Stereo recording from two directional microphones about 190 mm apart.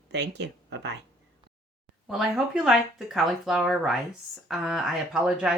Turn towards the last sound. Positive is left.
turn(degrees=-5)  # may be behind; listen again after turning